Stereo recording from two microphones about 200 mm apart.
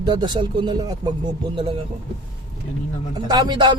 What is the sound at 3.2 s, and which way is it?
Speech, 20° right (ahead or behind).